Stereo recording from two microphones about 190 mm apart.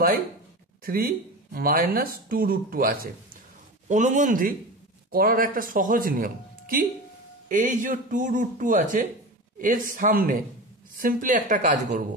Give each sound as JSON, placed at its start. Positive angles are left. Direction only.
{"t": 0.8, "sound": "speech", "side_deg": -50}